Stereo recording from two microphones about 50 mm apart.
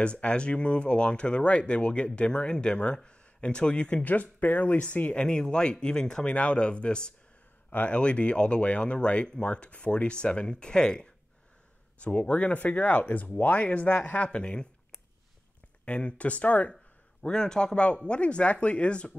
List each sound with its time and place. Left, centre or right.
0.0 s speech: left
4.0 s speech: left; by 11.1 s centre
12.0 s speech: left
15.8 s speech: left
16.7 s speech: centre